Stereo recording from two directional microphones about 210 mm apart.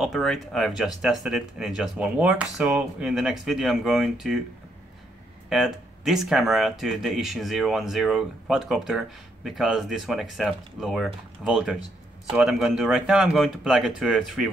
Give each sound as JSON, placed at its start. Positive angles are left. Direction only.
{"t": 0.0, "sound": "speech", "side_deg": 0}
{"t": 5.5, "sound": "speech", "side_deg": 0}